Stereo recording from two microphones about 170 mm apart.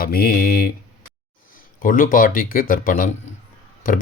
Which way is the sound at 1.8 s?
55° left (ahead or behind).